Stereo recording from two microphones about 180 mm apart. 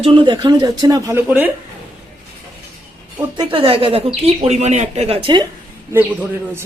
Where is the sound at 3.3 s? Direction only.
30° right (ahead or behind).